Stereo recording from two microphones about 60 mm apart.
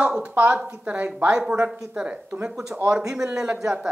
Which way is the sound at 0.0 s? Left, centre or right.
Centre.